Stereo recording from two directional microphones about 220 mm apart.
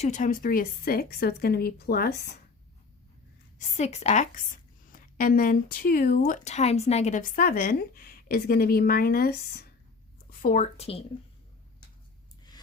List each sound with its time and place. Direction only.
0.0 s a woman's voice: 35° left (ahead or behind)
3.6 s speech: 30° left (ahead or behind)
10.4 s speech: 35° left (ahead or behind)